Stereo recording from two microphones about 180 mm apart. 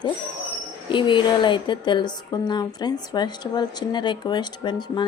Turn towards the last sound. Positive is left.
turn(degrees=25)  # may be behind; listen again after turning